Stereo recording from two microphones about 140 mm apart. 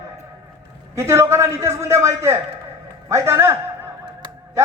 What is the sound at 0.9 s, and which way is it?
A man's voice, 20° right (ahead or behind).